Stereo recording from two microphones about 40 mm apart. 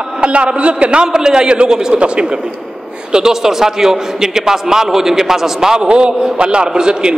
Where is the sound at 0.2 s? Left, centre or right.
Right.